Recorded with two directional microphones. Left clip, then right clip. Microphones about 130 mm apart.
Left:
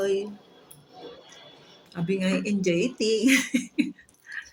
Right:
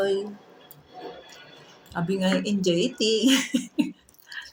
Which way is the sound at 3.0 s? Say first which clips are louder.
Left 1 dB; 25° left (ahead or behind).